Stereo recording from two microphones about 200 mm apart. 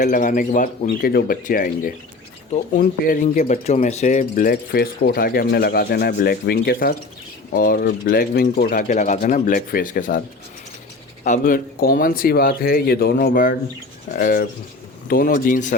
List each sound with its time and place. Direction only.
0.0 s speech: 40° left (ahead or behind)
11.2 s speech: 40° left (ahead or behind)